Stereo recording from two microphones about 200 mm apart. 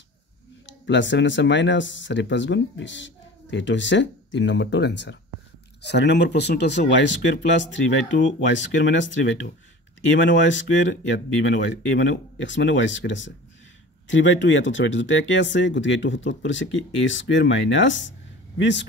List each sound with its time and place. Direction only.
0.7 s speech: 65° left (ahead or behind)